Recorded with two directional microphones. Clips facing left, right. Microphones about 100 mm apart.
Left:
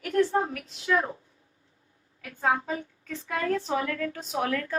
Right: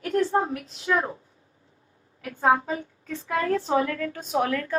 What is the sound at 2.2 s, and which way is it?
A woman's voice, 30° right (ahead or behind).